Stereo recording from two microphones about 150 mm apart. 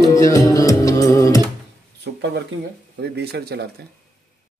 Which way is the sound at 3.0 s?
90° right.